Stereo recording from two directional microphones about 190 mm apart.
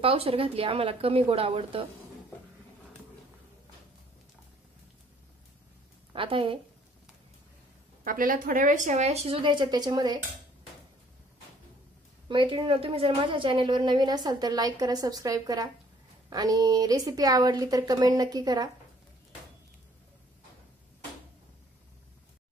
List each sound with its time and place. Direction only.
0.0 s a woman's voice: 30° right (ahead or behind)
6.1 s a woman's voice: 30° right (ahead or behind)
8.0 s speech: 45° right (ahead or behind); by 10.2 s 20° right (ahead or behind)
12.3 s a woman's voice: 25° right (ahead or behind)